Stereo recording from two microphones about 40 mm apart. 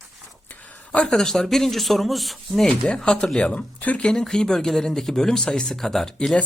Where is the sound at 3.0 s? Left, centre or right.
Centre.